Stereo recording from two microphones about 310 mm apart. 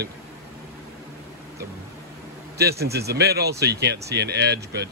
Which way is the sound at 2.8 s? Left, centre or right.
Right.